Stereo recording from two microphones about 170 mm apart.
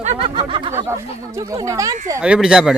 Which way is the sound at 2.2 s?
5° right (ahead or behind).